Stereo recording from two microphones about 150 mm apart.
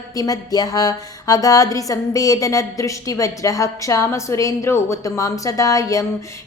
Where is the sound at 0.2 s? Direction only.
25° left (ahead or behind).